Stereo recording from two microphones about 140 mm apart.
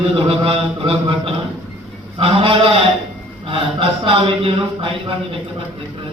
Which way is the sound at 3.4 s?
40° right (ahead or behind).